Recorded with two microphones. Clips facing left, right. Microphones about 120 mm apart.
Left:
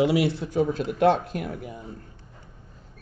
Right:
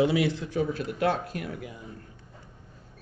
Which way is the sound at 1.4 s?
50° left (ahead or behind).